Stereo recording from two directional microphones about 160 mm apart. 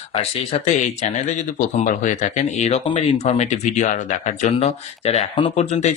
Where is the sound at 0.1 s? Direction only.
40° left (ahead or behind).